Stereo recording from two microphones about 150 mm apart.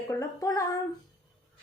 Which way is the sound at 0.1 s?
20° left (ahead or behind).